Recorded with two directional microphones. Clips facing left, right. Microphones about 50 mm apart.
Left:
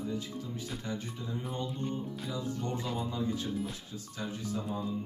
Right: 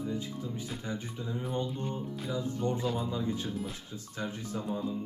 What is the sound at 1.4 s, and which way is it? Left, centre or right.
Music, centre.